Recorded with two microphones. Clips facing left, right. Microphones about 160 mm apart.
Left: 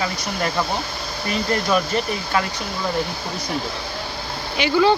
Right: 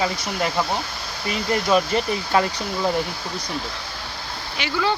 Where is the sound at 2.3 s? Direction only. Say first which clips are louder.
Right 3 dB; 30° right (ahead or behind).